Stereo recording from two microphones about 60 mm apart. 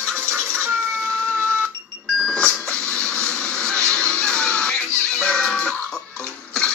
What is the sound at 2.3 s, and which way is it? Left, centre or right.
Music, centre.